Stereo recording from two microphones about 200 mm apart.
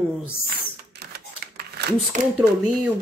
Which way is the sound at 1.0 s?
55° right (ahead or behind).